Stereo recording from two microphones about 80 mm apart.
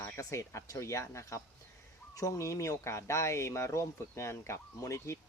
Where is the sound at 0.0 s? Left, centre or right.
Left.